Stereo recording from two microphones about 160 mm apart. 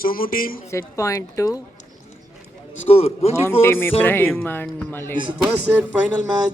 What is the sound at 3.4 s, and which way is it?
Speech, 15° left (ahead or behind).